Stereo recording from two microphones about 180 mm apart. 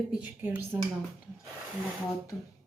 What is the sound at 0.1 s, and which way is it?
Speech, 10° right (ahead or behind).